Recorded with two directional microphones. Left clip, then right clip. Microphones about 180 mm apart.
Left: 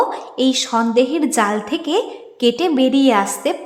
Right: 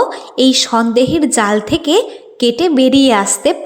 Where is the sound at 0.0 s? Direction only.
25° right (ahead or behind).